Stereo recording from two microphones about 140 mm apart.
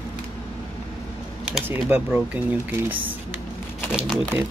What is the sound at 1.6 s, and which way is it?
Speech, 15° right (ahead or behind).